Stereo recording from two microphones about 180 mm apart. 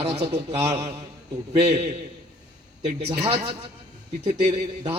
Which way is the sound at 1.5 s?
35° right (ahead or behind).